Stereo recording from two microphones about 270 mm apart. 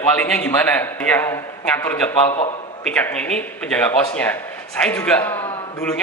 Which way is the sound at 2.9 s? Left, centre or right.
Centre.